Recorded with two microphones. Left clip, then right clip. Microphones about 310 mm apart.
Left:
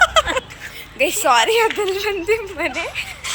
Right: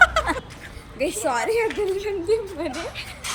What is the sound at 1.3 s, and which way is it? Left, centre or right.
Speech, left.